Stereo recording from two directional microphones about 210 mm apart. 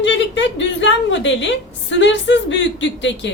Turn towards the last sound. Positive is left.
turn(degrees=60)  # may be behind; listen again after turning